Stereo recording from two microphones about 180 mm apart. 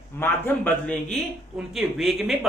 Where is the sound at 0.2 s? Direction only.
10° left (ahead or behind).